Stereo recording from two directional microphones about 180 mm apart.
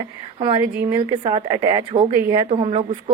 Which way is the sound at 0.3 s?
30° right (ahead or behind).